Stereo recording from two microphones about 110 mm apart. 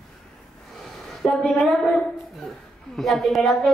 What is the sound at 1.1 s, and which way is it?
A woman's voice, centre (ahead or behind).